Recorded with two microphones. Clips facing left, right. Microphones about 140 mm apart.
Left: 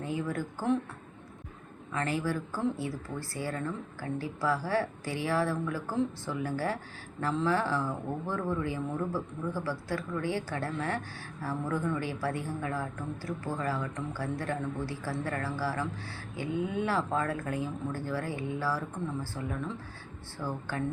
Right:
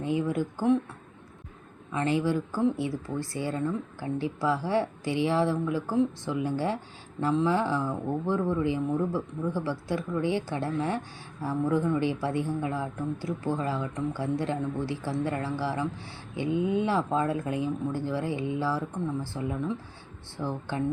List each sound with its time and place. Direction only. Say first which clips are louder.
0.0 s speech: right 6 dB; 20° right (ahead or behind)
1.9 s speech: right 5 dB; 20° right (ahead or behind)